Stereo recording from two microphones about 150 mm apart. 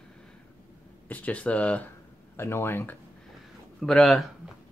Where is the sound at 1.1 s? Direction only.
10° left (ahead or behind).